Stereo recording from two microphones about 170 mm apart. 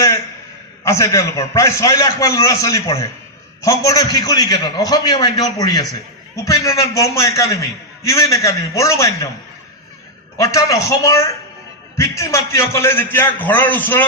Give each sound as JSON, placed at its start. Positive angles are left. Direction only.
{"t": 0.9, "sound": "a man's voice", "side_deg": 20}
{"t": 10.3, "sound": "a man's voice", "side_deg": 20}